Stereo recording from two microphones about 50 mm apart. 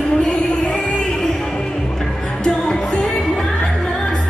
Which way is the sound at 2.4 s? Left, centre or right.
Centre.